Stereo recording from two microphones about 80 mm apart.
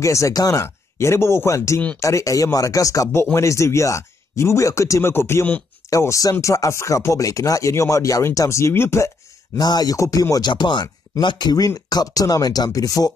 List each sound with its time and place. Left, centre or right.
0.0 s speech: left
5.9 s speech: left
9.6 s speech: left
9.9 s speech: left
10.5 s speech: left